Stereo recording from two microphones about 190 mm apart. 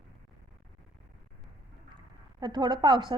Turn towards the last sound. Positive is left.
turn(degrees=-25)  # may be behind; listen again after turning